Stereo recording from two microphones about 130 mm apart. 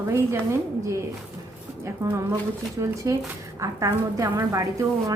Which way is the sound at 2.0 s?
25° right (ahead or behind).